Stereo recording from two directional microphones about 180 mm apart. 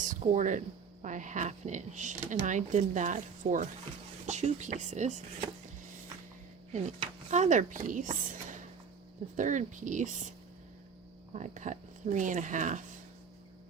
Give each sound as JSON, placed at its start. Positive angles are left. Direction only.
{"t": 0.0, "sound": "speech", "side_deg": -45}
{"t": 6.7, "sound": "speech", "side_deg": -40}
{"t": 11.3, "sound": "speech", "side_deg": -40}